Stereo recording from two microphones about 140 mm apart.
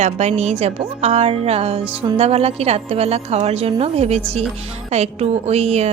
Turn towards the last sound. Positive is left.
turn(degrees=-45)  # may be behind; listen again after turning